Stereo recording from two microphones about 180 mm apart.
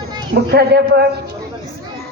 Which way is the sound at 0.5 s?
65° right (ahead or behind).